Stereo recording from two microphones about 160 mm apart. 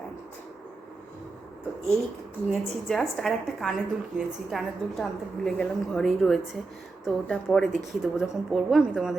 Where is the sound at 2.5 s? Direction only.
Centre (ahead or behind).